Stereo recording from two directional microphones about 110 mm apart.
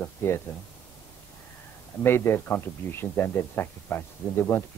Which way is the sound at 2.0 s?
20° left (ahead or behind).